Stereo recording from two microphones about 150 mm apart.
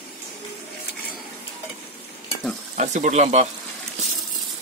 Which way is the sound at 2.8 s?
50° right (ahead or behind).